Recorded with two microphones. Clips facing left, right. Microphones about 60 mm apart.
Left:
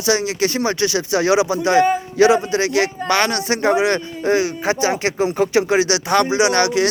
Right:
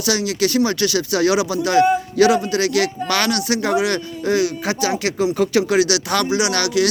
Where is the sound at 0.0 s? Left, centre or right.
Left.